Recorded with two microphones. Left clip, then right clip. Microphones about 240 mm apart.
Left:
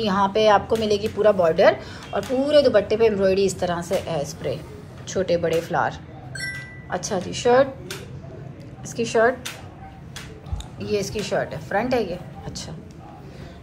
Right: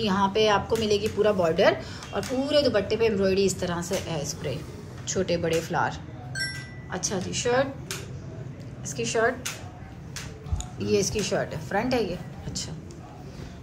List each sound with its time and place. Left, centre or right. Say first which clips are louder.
0.0 s a woman's voice: left 4 dB; centre
8.8 s a woman's voice: left 6 dB; centre
10.8 s speech: even; centre